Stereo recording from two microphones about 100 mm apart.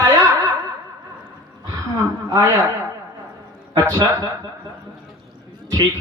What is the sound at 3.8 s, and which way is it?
Speech, 35° right (ahead or behind).